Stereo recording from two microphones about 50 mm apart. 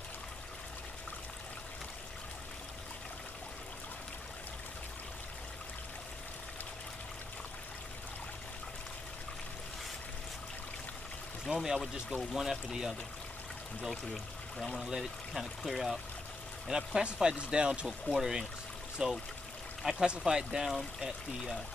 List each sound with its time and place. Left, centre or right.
11.5 s speech: centre